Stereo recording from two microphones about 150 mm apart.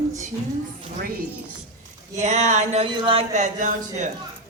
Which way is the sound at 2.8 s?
35° right (ahead or behind).